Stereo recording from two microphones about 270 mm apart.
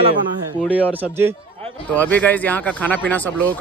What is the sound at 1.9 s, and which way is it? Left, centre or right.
Speech, centre.